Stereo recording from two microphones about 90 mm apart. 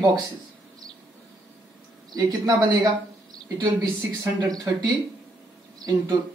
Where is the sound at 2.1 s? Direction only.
45° right (ahead or behind).